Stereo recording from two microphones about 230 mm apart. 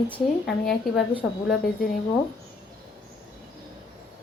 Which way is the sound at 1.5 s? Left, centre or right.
Left.